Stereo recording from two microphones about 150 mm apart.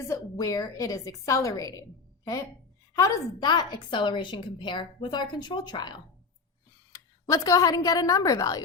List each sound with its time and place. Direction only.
0.1 s a woman's voice: 25° left (ahead or behind)